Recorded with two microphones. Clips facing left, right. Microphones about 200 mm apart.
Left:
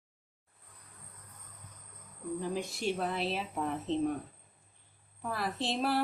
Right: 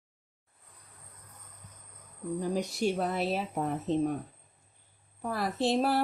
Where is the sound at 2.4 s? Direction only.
40° right (ahead or behind).